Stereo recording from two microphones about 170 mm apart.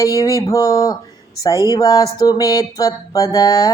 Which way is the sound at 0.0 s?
20° left (ahead or behind).